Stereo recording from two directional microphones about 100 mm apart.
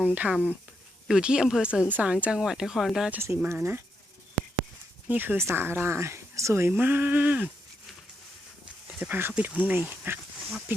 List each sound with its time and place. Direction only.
0.0 s speech: 15° right (ahead or behind)
3.1 s speech: 25° right (ahead or behind)
5.0 s speech: 20° right (ahead or behind)
9.0 s speech: 20° right (ahead or behind)